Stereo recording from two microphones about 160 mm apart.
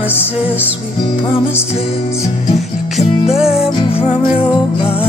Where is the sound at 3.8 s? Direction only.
35° left (ahead or behind).